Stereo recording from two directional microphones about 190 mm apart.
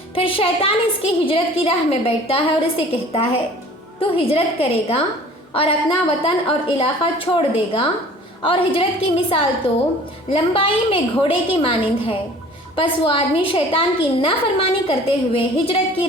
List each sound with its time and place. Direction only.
0.1 s a woman's voice: 30° left (ahead or behind)
10.2 s a woman's voice: 30° left (ahead or behind)